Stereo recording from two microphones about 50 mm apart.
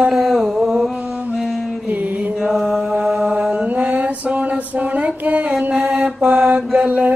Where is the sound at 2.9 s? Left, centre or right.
Right.